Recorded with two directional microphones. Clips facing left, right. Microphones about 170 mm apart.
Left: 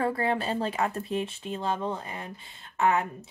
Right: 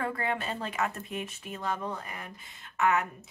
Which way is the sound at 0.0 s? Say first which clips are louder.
Left 5 dB; 30° left (ahead or behind).